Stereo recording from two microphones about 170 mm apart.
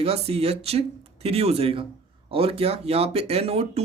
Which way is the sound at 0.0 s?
35° right (ahead or behind).